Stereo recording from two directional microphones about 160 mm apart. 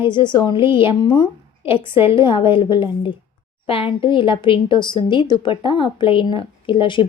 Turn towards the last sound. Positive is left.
turn(degrees=30)  # may be behind; listen again after turning